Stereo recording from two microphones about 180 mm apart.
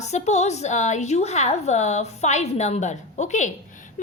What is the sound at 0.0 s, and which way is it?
A woman's voice, 40° left (ahead or behind).